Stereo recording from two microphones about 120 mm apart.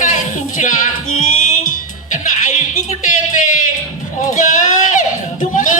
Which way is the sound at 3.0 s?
90° left.